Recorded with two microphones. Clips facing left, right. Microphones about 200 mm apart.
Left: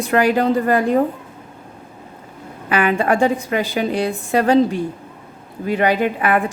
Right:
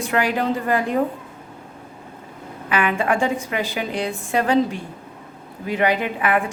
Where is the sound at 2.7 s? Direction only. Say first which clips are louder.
Left 4 dB; 40° left (ahead or behind).